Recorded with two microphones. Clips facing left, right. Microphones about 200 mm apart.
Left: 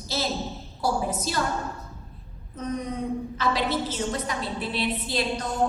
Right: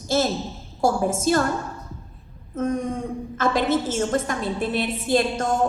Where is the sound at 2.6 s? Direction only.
50° right (ahead or behind).